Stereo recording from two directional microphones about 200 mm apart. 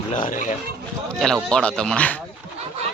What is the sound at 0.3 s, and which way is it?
Speech, 40° left (ahead or behind).